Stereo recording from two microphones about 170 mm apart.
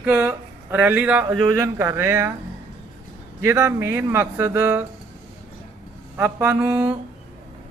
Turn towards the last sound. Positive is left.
turn(degrees=-10)  # may be behind; listen again after turning